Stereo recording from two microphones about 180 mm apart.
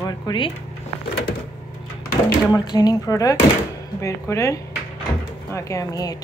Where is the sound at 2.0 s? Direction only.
20° left (ahead or behind).